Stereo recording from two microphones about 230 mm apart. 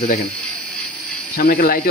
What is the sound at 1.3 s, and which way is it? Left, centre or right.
Speech, left.